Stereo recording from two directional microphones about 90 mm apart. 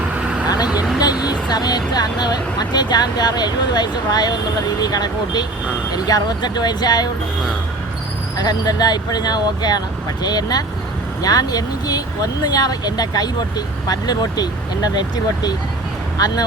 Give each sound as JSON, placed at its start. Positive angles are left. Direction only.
{"t": 0.0, "sound": "vehicle", "side_deg": -15}
{"t": 0.7, "sound": "speech", "side_deg": -10}
{"t": 1.2, "sound": "speech", "side_deg": 50}
{"t": 8.4, "sound": "speech", "side_deg": 50}